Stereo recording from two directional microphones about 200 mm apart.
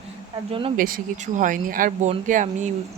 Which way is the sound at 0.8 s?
45° right (ahead or behind).